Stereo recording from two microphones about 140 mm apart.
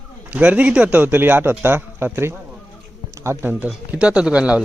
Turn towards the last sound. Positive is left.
turn(degrees=-10)  # may be behind; listen again after turning